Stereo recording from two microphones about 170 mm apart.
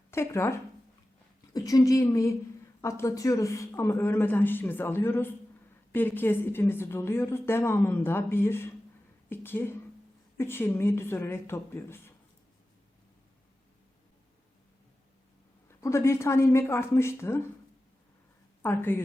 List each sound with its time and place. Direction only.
0.1 s speech: 15° left (ahead or behind)
15.8 s speech: 15° left (ahead or behind)
18.6 s speech: 10° left (ahead or behind)